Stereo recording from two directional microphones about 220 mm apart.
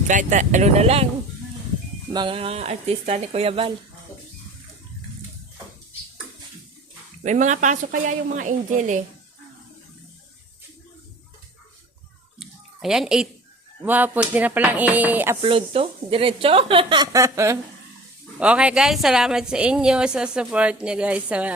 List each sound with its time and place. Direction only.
0.1 s a woman's voice: 35° right (ahead or behind)
2.1 s speech: 25° right (ahead or behind)
7.3 s a woman's voice: 35° right (ahead or behind)
12.4 s a sound: centre (ahead or behind)
13.8 s speech: 10° right (ahead or behind)
15.4 s a woman's voice: 25° right (ahead or behind); by 21.5 s 5° right (ahead or behind)